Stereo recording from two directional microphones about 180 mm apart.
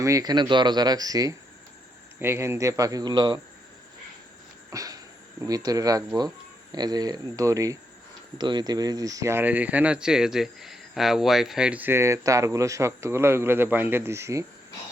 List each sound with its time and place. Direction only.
0.0 s speech: 20° right (ahead or behind)
4.7 s a sound: 20° right (ahead or behind)
5.4 s speech: 20° right (ahead or behind)